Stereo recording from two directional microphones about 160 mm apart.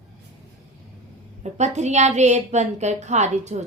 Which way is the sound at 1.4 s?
45° right (ahead or behind).